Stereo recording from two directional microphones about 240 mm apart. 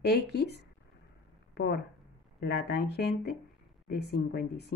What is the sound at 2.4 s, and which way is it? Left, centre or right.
Speech, left.